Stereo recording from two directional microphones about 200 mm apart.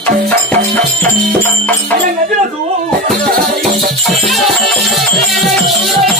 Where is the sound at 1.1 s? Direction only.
40° right (ahead or behind).